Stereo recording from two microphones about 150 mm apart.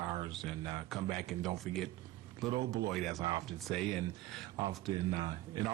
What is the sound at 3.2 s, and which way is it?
Speech, 35° right (ahead or behind).